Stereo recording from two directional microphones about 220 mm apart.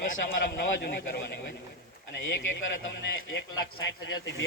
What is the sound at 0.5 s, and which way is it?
Speech, 45° left (ahead or behind).